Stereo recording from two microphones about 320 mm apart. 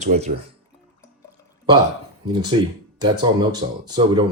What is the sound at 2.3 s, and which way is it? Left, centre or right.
Speech, centre.